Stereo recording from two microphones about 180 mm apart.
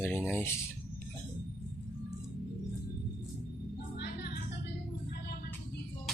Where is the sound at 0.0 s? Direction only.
15° left (ahead or behind).